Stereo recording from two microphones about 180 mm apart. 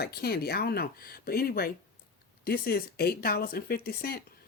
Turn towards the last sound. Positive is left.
turn(degrees=60)  # may be behind; listen again after turning